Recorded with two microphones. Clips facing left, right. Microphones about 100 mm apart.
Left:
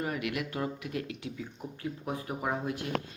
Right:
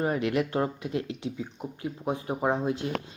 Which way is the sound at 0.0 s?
30° right (ahead or behind).